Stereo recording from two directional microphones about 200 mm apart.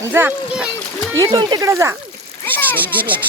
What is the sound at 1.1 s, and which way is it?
Speech, 20° right (ahead or behind).